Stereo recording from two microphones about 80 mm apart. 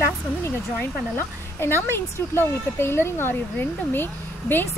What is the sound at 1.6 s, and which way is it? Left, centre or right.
Speech, left.